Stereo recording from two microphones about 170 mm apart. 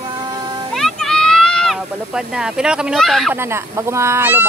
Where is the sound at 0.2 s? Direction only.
25° right (ahead or behind).